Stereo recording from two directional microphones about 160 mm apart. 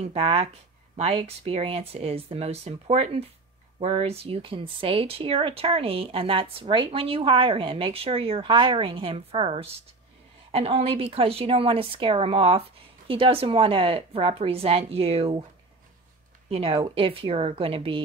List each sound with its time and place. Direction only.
0.0 s speech: 35° right (ahead or behind)
16.4 s speech: 40° right (ahead or behind)